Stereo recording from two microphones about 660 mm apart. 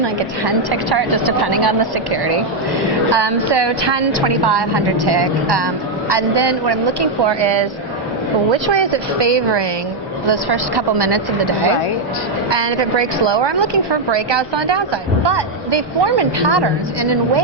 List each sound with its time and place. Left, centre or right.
0.4 s a woman's voice: right
12.5 s a woman's voice: right